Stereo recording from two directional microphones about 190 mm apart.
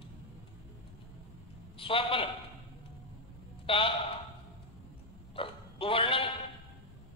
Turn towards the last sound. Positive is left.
turn(degrees=30)  # may be behind; listen again after turning